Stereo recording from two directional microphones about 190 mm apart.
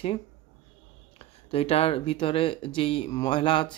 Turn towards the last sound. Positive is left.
turn(degrees=25)  # may be behind; listen again after turning